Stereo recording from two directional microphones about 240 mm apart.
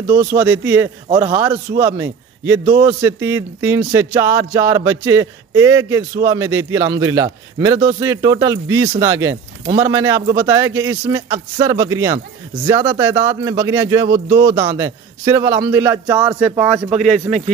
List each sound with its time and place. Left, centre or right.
0.4 s speech: centre
1.0 s a man's voice: centre